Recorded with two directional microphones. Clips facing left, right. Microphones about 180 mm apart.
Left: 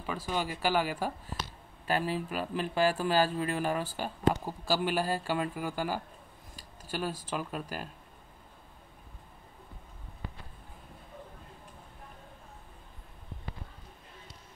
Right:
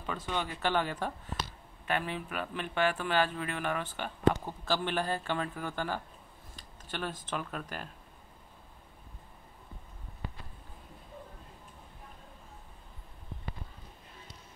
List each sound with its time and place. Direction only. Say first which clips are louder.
0.0 s speech: left 2 dB; 5° left (ahead or behind)
1.9 s speech: left 3 dB; 35° left (ahead or behind)
4.3 s speech: even; 10° left (ahead or behind)